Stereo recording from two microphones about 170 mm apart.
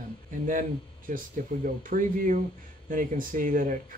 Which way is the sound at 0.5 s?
50° right (ahead or behind).